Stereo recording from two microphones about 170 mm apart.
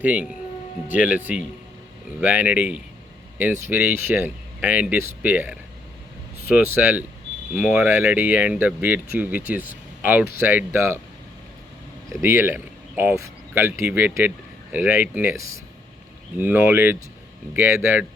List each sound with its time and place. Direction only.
0.0 s speech: 10° right (ahead or behind)
12.0 s speech: 15° right (ahead or behind)
16.4 s speech: 10° right (ahead or behind)